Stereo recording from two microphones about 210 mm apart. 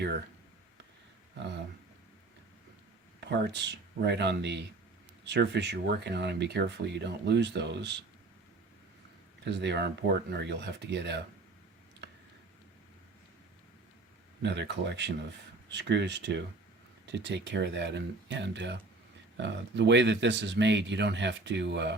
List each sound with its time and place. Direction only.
3.2 s speech: 55° right (ahead or behind)
9.4 s speech: 55° right (ahead or behind)
14.4 s speech: 55° right (ahead or behind)